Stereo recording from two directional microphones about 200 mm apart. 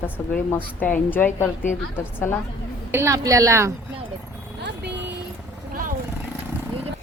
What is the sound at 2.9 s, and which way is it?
Speech, 15° right (ahead or behind).